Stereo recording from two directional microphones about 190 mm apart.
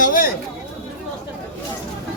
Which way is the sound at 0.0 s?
45° left (ahead or behind).